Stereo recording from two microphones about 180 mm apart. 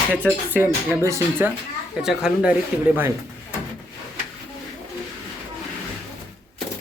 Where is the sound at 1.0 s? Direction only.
15° right (ahead or behind).